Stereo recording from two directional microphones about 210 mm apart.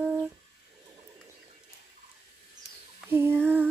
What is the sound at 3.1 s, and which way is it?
Female singing, 10° right (ahead or behind).